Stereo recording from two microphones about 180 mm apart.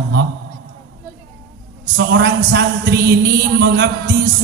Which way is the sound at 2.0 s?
70° right (ahead or behind).